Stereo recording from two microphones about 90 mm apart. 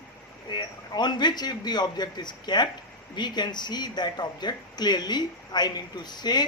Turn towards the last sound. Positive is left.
turn(degrees=50)  # may be behind; listen again after turning